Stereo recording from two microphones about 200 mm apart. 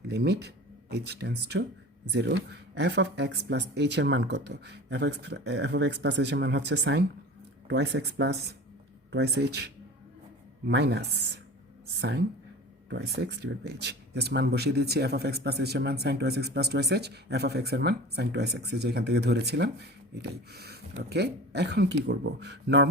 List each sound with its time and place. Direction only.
0.1 s speech: 55° right (ahead or behind)